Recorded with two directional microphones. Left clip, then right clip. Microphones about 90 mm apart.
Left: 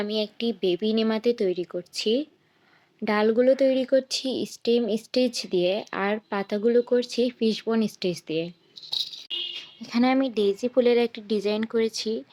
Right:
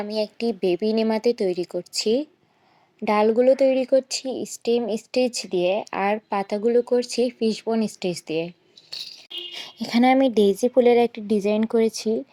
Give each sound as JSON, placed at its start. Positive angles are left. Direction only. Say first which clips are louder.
{"t": 0.0, "sound": "speech", "louder": "right 2 dB", "side_deg": -25}
{"t": 4.2, "sound": "a woman's voice", "louder": "even", "side_deg": -45}
{"t": 4.4, "sound": "speech", "louder": "right 2 dB", "side_deg": -5}
{"t": 9.7, "sound": "speech", "louder": "right 9 dB", "side_deg": -65}
{"t": 10.0, "sound": "speech", "louder": "right 5 dB", "side_deg": -40}